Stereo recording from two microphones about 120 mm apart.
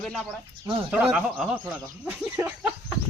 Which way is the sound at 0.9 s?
10° right (ahead or behind).